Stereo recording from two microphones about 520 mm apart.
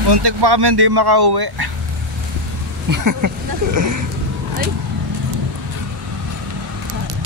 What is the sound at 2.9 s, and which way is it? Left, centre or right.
Speech, right.